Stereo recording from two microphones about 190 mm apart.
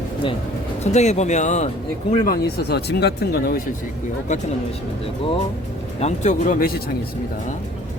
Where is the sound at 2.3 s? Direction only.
60° left (ahead or behind).